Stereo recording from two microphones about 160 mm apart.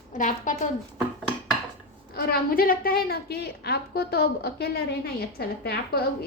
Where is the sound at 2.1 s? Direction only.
70° left (ahead or behind).